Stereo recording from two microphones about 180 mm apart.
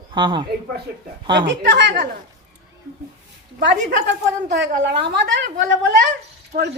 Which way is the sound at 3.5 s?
55° right (ahead or behind).